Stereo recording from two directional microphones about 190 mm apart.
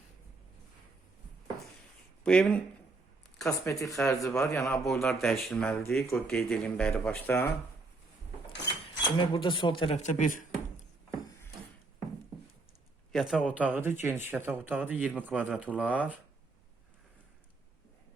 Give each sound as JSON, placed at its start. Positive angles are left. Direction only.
{"t": 2.2, "sound": "speech", "side_deg": 5}
{"t": 3.7, "sound": "speech", "side_deg": 15}
{"t": 4.4, "sound": "speech", "side_deg": 5}
{"t": 4.6, "sound": "speech", "side_deg": 15}
{"t": 4.9, "sound": "speech", "side_deg": 0}
{"t": 9.0, "sound": "speech", "side_deg": 25}
{"t": 10.0, "sound": "a sound", "side_deg": 40}
{"t": 13.1, "sound": "a man's voice", "side_deg": 0}